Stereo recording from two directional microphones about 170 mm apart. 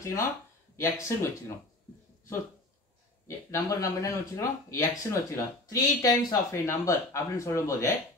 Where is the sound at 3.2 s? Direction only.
20° left (ahead or behind).